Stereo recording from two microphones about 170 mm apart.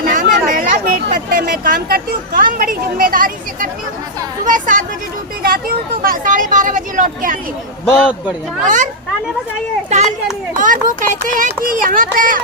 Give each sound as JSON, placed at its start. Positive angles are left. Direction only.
{"t": 0.0, "sound": "speech", "side_deg": -55}
{"t": 7.9, "sound": "a man's voice", "side_deg": -5}
{"t": 8.6, "sound": "speech", "side_deg": -50}
{"t": 10.6, "sound": "speech", "side_deg": -50}